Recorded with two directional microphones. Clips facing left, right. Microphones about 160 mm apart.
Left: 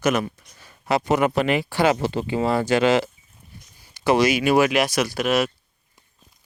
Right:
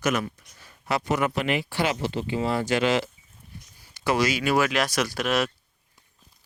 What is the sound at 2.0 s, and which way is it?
Speech, 45° left (ahead or behind).